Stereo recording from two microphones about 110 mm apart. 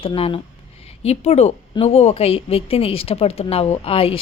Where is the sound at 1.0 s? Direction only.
75° left (ahead or behind).